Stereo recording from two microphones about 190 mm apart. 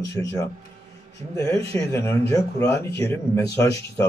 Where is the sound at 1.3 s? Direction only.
15° left (ahead or behind).